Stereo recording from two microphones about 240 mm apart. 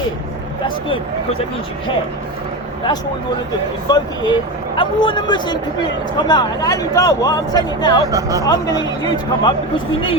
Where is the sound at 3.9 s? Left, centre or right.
Centre.